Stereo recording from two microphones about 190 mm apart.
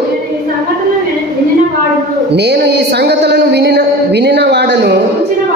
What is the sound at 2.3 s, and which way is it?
Speech, 60° right (ahead or behind).